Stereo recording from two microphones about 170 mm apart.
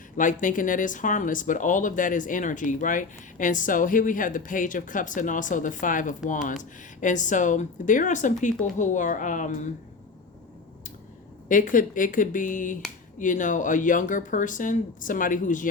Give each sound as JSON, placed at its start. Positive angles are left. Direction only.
{"t": 0.2, "sound": "speech", "side_deg": 50}
{"t": 11.4, "sound": "speech", "side_deg": 50}